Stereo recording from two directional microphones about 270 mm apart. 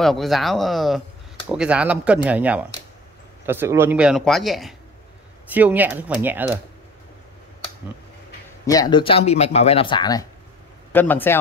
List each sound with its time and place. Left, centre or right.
0.0 s speech: centre
8.6 s a man's voice: centre